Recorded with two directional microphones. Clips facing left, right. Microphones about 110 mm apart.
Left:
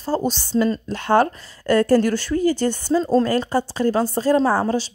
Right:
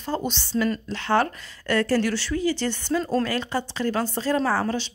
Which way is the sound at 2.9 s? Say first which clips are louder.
Left 6 dB; 30° left (ahead or behind).